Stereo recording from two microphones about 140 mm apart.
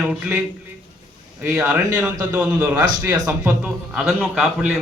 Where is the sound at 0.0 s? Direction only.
5° right (ahead or behind).